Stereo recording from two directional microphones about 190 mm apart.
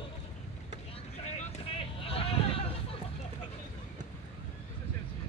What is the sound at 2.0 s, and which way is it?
Vehicle, 30° left (ahead or behind).